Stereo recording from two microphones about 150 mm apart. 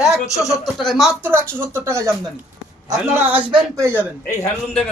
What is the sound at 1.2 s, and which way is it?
Speech, 15° right (ahead or behind).